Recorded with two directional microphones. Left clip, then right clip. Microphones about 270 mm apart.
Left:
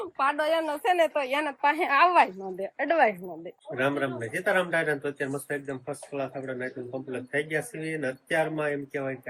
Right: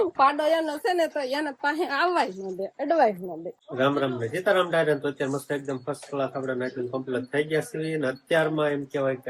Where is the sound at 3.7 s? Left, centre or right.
Centre.